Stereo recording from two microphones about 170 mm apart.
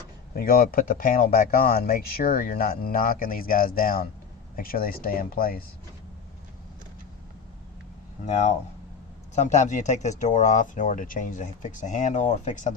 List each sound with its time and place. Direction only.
0.3 s speech: 60° left (ahead or behind)
8.2 s speech: 40° left (ahead or behind)